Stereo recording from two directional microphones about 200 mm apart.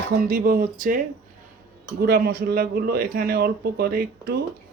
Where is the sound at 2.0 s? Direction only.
50° right (ahead or behind).